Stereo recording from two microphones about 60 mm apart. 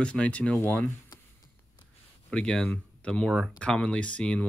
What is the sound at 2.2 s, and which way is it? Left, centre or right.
Speech, centre.